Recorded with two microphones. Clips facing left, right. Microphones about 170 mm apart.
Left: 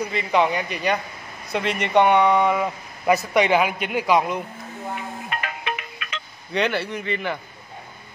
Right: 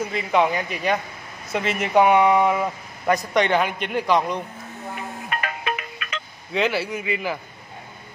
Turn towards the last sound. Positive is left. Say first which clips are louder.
# even
turn(degrees=-5)  # may be behind; listen again after turning